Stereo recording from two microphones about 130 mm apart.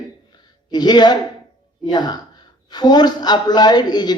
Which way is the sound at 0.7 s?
35° left (ahead or behind).